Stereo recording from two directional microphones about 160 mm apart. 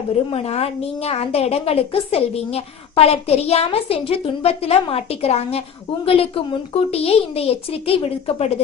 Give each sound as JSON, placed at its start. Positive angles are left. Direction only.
{"t": 0.3, "sound": "a woman's voice", "side_deg": 40}